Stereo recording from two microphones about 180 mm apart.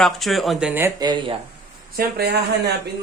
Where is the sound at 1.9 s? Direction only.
60° right (ahead or behind).